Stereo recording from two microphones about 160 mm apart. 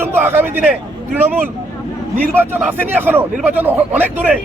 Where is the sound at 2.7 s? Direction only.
10° right (ahead or behind).